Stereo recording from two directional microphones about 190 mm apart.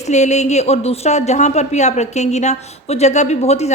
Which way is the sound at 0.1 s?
40° left (ahead or behind).